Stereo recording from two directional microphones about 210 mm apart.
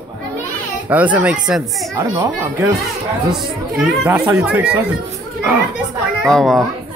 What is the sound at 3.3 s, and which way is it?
Speech, centre (ahead or behind).